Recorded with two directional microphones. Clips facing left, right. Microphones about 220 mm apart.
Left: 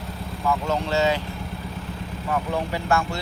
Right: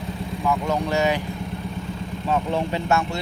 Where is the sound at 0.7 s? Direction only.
15° right (ahead or behind).